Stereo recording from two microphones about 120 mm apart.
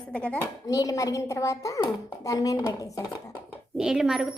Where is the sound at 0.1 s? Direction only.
10° left (ahead or behind).